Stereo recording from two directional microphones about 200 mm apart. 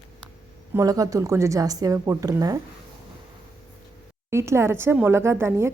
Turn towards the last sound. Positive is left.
turn(degrees=-10)  # may be behind; listen again after turning